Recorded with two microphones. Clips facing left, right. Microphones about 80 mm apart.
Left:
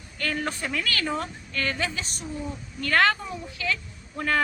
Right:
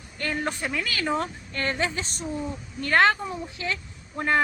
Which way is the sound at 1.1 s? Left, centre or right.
Right.